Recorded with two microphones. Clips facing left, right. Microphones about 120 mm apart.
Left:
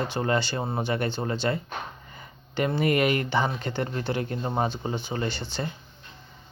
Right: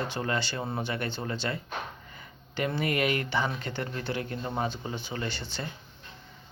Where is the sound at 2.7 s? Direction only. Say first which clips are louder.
Left 5 dB; 30° left (ahead or behind).